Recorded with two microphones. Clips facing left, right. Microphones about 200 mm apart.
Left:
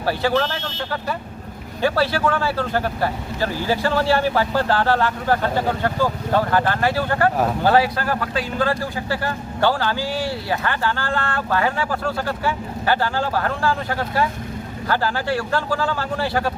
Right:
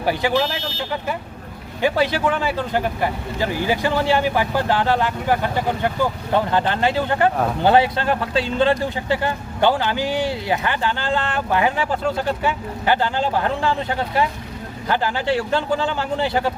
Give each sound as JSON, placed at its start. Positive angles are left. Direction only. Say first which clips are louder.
{"t": 0.0, "sound": "a man's voice", "louder": "even", "side_deg": -15}